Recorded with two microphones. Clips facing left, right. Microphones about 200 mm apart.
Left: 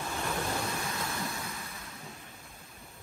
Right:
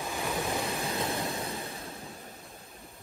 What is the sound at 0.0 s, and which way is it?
Waves, 15° right (ahead or behind).